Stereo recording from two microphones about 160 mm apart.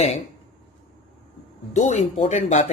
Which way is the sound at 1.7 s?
45° left (ahead or behind).